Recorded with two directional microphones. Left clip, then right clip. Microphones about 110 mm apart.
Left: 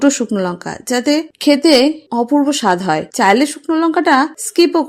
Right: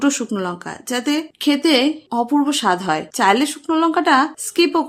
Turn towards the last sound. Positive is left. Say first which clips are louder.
# left 4 dB
turn(degrees=40)  # may be behind; listen again after turning